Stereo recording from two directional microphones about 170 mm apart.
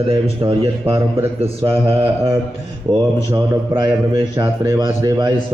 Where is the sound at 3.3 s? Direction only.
20° right (ahead or behind).